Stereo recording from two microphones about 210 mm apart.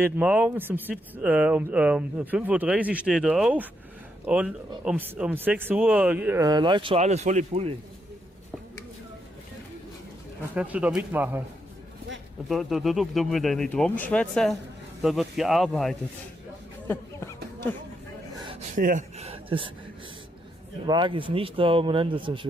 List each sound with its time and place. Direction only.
0.0 s speech: 5° right (ahead or behind); by 7.7 s 30° right (ahead or behind)
10.5 s speech: 5° right (ahead or behind)
12.4 s speech: centre (ahead or behind)
16.8 s a sound: 10° left (ahead or behind)
18.8 s speech: 35° right (ahead or behind)
20.8 s a man's voice: 20° right (ahead or behind)